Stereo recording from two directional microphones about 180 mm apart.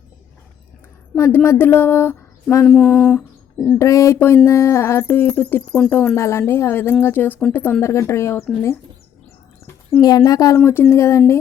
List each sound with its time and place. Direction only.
1.1 s speech: 15° left (ahead or behind)
10.0 s speech: 20° left (ahead or behind)